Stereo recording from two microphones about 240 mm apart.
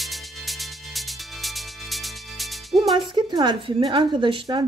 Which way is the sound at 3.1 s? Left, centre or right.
Centre.